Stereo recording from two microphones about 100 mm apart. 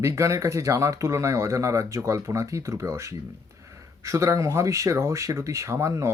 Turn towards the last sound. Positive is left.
turn(degrees=-30)  # may be behind; listen again after turning